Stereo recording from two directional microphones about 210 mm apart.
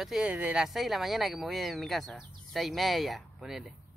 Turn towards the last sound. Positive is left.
turn(degrees=0)  # may be behind; listen again after turning